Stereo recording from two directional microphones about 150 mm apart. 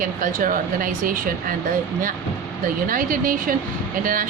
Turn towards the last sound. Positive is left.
turn(degrees=-65)  # may be behind; listen again after turning